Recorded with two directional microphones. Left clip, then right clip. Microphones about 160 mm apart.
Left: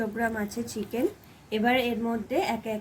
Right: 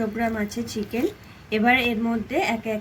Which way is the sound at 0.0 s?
5° right (ahead or behind).